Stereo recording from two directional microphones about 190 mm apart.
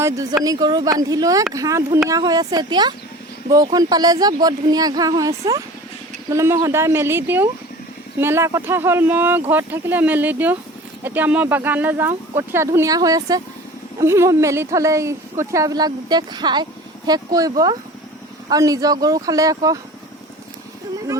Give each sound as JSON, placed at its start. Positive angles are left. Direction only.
{"t": 0.0, "sound": "speech", "side_deg": -15}